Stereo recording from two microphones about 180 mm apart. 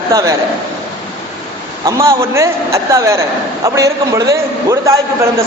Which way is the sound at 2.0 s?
15° right (ahead or behind).